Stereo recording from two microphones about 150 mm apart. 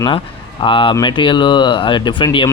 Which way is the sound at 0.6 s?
35° left (ahead or behind).